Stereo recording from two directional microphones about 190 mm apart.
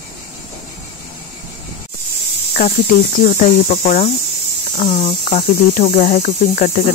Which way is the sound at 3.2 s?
40° left (ahead or behind).